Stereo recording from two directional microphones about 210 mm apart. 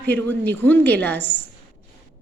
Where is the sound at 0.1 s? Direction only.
10° left (ahead or behind).